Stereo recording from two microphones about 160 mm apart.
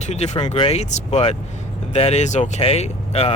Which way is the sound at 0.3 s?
30° left (ahead or behind).